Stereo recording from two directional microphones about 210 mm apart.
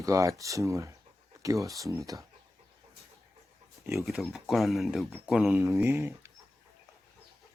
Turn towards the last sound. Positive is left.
turn(degrees=-10)  # may be behind; listen again after turning